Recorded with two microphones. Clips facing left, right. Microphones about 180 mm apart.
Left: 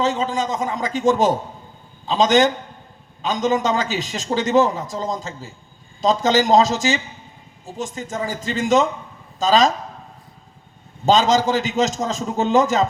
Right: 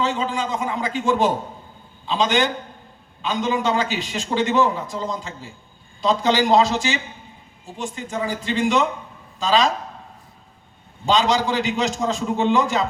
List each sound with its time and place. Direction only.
0.0 s a man's voice: 40° left (ahead or behind)
11.0 s a man's voice: 45° left (ahead or behind)